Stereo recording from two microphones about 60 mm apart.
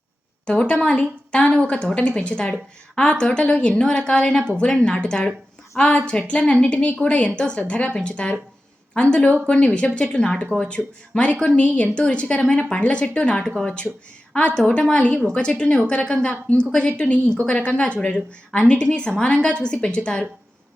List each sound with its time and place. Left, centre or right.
0.4 s a woman's voice: centre